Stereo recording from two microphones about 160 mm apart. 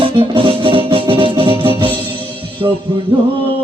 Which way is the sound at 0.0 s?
35° right (ahead or behind).